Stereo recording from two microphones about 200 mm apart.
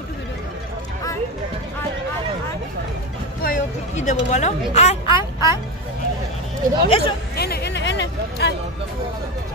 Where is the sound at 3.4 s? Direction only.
40° left (ahead or behind).